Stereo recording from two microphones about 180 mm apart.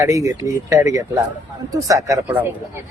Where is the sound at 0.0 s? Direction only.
15° right (ahead or behind).